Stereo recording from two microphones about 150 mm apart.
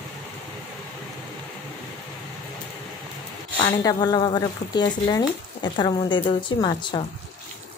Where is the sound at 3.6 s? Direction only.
25° left (ahead or behind).